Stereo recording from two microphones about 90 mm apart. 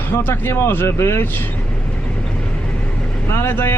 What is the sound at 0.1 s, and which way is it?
Speech, 25° left (ahead or behind).